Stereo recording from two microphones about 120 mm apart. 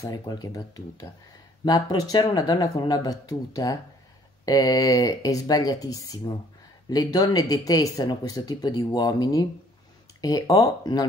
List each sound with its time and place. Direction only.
0.3 s speech: 35° left (ahead or behind)